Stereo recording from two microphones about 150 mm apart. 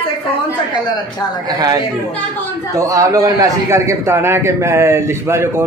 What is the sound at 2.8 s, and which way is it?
A man's voice, 20° right (ahead or behind).